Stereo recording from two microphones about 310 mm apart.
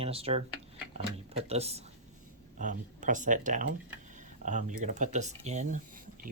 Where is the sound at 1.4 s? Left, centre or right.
Centre.